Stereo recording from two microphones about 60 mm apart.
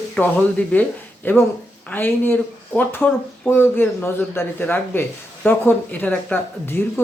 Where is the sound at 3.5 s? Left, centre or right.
Left.